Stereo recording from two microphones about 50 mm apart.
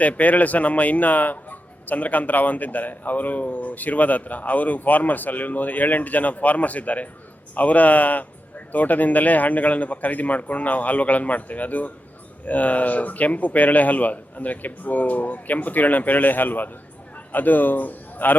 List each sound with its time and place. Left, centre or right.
0.0 s a man's voice: left